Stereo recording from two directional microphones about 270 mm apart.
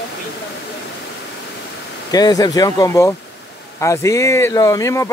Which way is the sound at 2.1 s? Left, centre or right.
Centre.